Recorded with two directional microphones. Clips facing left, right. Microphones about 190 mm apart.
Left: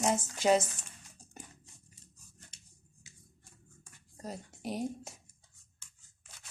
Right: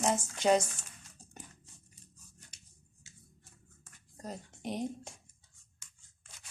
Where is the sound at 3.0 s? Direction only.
10° left (ahead or behind).